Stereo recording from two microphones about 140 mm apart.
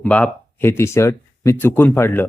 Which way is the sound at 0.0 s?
10° left (ahead or behind).